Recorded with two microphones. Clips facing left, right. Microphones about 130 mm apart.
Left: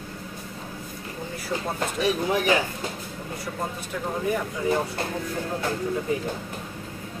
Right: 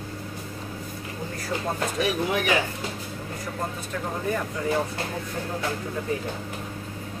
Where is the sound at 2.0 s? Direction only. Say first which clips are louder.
Left 2 dB; 35° left (ahead or behind).